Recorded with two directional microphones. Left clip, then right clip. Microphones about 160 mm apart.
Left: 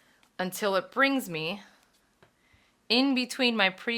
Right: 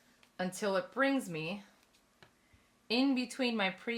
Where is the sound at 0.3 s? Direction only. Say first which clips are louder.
Left 6 dB; 25° left (ahead or behind).